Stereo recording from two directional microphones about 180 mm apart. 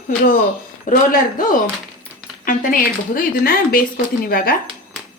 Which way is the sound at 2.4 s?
50° left (ahead or behind).